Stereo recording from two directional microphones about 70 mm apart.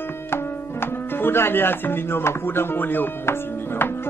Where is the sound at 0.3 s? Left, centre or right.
Left.